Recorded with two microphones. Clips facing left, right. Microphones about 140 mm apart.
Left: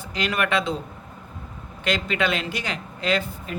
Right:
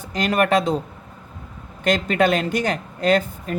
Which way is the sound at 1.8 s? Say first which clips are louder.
Right 6 dB; 45° right (ahead or behind).